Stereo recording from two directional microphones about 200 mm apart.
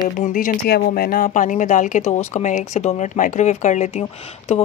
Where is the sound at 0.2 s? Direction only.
40° left (ahead or behind).